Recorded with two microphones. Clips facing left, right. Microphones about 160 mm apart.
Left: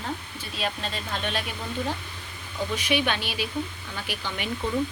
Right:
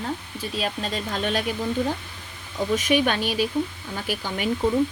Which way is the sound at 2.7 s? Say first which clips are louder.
Right 5 dB; 45° right (ahead or behind).